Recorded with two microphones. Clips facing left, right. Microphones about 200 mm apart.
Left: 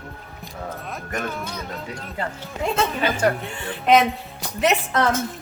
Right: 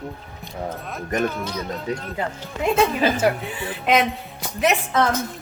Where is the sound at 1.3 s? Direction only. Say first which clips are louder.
Right 3 dB; 5° left (ahead or behind).